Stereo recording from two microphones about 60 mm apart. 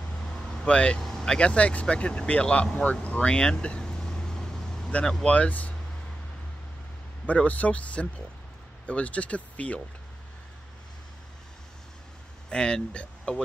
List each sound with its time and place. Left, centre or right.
0.3 s vehicle: centre
1.0 s speech: centre
5.2 s speech: left
7.2 s speech: left
12.4 s speech: centre